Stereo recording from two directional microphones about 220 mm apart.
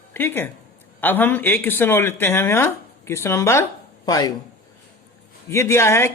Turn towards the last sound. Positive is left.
turn(degrees=10)  # may be behind; listen again after turning